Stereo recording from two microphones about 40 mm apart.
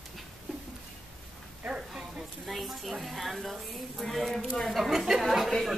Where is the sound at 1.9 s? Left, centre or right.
Centre.